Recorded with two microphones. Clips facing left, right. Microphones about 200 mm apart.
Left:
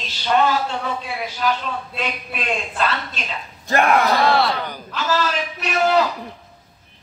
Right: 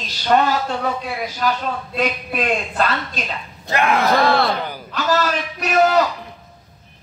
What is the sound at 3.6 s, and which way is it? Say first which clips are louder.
Speech: left 2 dB; 45° left (ahead or behind).